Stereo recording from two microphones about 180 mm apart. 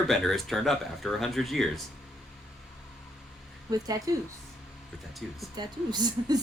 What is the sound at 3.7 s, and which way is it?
Speech, 20° right (ahead or behind).